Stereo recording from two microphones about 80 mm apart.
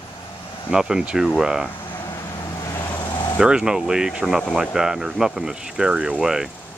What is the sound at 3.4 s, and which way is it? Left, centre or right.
Speech, centre.